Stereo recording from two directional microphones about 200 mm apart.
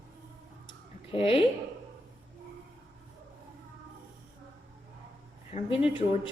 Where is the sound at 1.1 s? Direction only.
30° left (ahead or behind).